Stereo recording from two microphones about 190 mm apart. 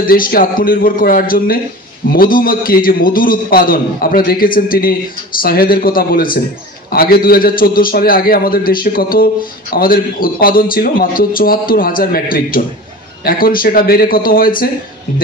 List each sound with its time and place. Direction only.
0.0 s a man's voice: 50° left (ahead or behind)